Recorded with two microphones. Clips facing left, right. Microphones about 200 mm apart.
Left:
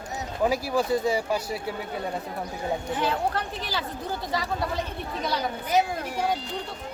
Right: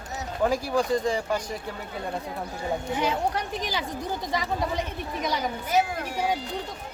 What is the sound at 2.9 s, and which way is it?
Speech, 15° right (ahead or behind).